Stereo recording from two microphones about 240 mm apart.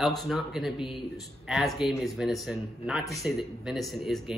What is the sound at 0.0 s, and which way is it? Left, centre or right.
Speech, centre.